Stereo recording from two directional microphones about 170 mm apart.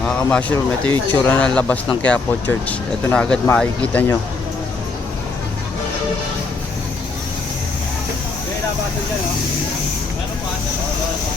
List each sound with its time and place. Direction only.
0.0 s speech: 10° left (ahead or behind)
0.9 s speech: 25° right (ahead or behind)
1.1 s speech: 10° left (ahead or behind)